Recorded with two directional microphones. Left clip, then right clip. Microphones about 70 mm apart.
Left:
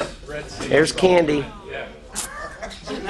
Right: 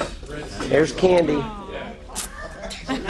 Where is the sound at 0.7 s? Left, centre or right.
Left.